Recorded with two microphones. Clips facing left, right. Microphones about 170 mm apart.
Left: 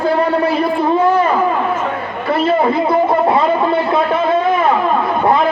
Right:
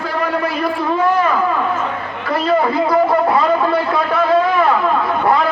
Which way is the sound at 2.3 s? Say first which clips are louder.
Left 2 dB; 25° left (ahead or behind).